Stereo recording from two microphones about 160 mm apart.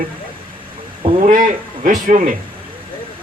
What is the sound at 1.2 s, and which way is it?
Speech, 55° right (ahead or behind).